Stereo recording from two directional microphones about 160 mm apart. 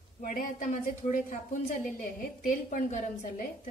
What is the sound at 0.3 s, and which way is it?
A woman's voice, 55° left (ahead or behind).